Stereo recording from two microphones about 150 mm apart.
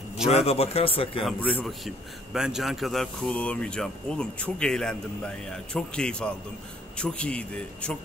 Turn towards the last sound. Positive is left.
turn(degrees=5)  # may be behind; listen again after turning